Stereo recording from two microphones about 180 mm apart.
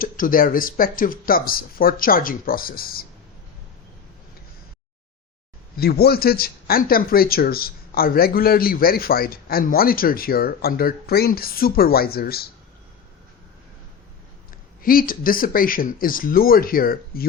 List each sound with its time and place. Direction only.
0.0 s speech: 50° left (ahead or behind)
5.7 s speech: 60° left (ahead or behind)
14.8 s speech: 55° left (ahead or behind)